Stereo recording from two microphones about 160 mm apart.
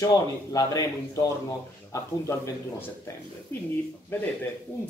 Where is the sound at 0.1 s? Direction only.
20° left (ahead or behind).